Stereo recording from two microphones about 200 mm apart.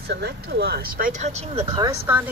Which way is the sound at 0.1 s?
55° right (ahead or behind).